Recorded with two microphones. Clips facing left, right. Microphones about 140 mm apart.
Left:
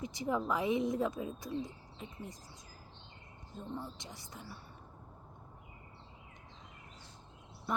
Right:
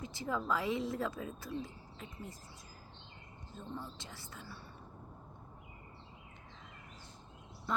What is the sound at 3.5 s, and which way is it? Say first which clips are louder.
Speech: left 2 dB; 20° left (ahead or behind).